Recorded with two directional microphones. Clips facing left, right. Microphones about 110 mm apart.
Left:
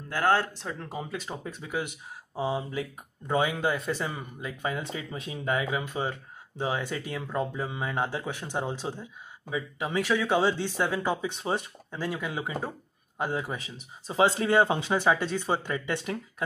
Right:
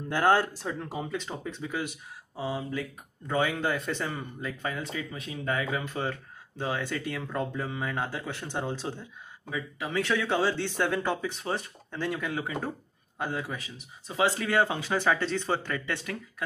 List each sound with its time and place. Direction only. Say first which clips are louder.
0.1 s speech: right 1 dB; 15° right (ahead or behind)
0.6 s speech: right 2 dB; 5° right (ahead or behind); by 4.6 s 10° left (ahead or behind)
4.6 s speech: left 3 dB; 25° left (ahead or behind)